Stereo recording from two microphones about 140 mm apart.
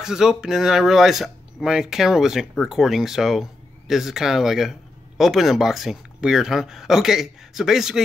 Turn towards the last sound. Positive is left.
turn(degrees=-5)  # may be behind; listen again after turning